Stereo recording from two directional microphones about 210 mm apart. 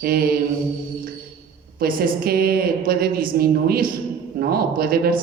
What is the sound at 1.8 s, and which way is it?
A woman's voice, 45° right (ahead or behind).